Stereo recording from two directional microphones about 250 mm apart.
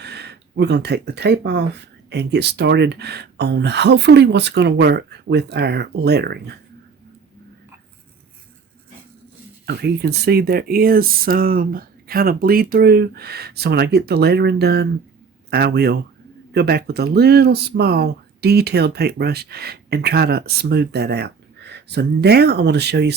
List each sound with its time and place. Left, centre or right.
0.0 s speech: right
9.6 s speech: right